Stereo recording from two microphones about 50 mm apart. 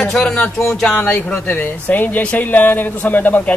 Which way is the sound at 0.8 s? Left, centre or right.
Left.